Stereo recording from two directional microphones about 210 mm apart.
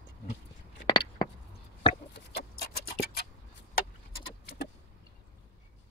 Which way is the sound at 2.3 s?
50° left (ahead or behind).